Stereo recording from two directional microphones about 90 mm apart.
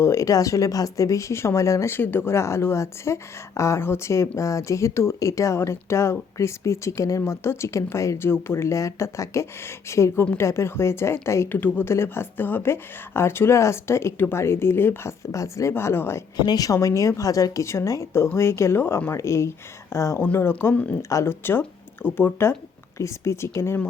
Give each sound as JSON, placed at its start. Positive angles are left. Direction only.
{"t": 0.0, "sound": "a woman's voice", "side_deg": 35}
{"t": 16.4, "sound": "speech", "side_deg": 45}
{"t": 20.2, "sound": "a woman's voice", "side_deg": 20}
{"t": 21.1, "sound": "speech", "side_deg": 35}
{"t": 22.0, "sound": "a woman's voice", "side_deg": 25}